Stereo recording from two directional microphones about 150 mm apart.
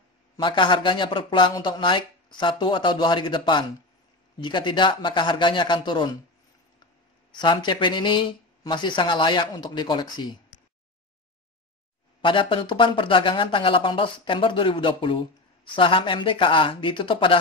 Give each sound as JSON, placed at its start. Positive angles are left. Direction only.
{"t": 0.4, "sound": "speech", "side_deg": 30}
{"t": 7.3, "sound": "speech", "side_deg": 30}
{"t": 12.2, "sound": "speech", "side_deg": 35}